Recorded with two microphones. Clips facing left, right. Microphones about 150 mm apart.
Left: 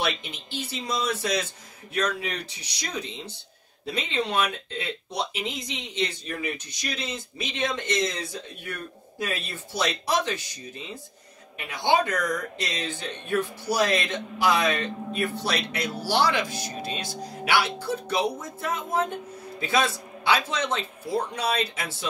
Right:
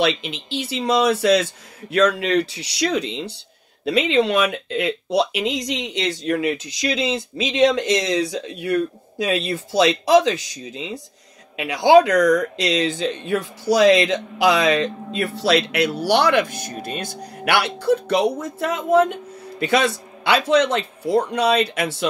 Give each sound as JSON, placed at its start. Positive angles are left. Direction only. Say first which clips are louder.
{"t": 0.0, "sound": "speech", "louder": "right 8 dB", "side_deg": -85}
{"t": 19.6, "sound": "speech", "louder": "right 6 dB", "side_deg": -70}